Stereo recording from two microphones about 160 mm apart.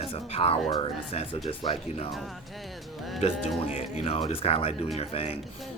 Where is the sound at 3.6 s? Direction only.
35° left (ahead or behind).